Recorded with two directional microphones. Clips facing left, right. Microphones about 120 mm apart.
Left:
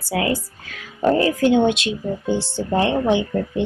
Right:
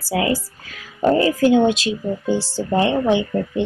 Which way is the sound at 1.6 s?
35° right (ahead or behind).